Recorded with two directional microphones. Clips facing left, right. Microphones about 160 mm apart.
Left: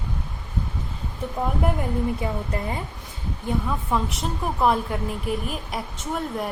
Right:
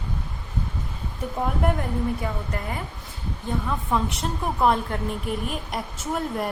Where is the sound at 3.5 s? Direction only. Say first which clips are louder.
Left 1 dB; 5° left (ahead or behind).